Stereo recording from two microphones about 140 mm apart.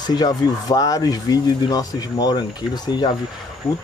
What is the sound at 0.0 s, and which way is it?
Speech, 30° left (ahead or behind).